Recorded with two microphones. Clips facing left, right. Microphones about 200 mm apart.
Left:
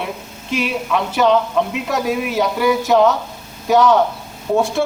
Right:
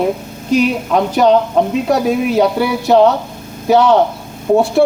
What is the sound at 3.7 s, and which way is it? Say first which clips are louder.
Speech: right 3 dB; 30° right (ahead or behind).